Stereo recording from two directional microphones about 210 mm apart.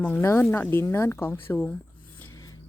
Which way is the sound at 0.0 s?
10° left (ahead or behind).